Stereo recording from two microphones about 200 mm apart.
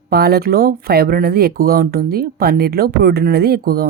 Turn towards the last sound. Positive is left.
turn(degrees=-50)  # may be behind; listen again after turning